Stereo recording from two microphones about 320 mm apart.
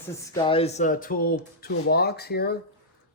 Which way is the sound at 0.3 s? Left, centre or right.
Centre.